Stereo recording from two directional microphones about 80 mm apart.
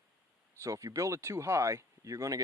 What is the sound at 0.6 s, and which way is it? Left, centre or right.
Speech, right.